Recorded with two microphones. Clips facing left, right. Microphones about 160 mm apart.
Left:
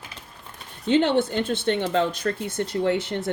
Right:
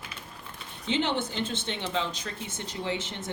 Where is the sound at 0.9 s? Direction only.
55° left (ahead or behind).